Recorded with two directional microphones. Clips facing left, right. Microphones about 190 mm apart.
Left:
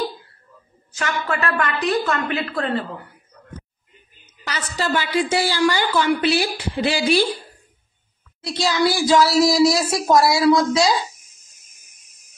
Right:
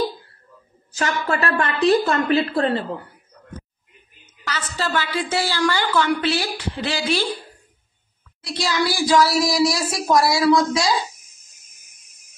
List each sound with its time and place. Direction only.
0.9 s a woman's voice: 35° right (ahead or behind)
4.5 s a woman's voice: 15° left (ahead or behind)
8.4 s speech: 25° left (ahead or behind)